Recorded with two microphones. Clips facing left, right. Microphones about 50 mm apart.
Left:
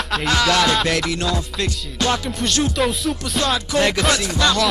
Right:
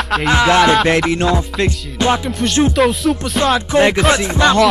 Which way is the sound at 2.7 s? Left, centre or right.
Centre.